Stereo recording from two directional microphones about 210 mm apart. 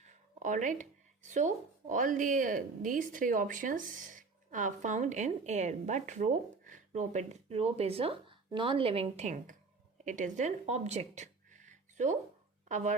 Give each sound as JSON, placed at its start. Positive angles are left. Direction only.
{"t": 0.0, "sound": "speech", "side_deg": -35}